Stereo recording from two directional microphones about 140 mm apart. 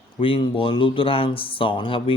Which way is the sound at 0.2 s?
40° left (ahead or behind).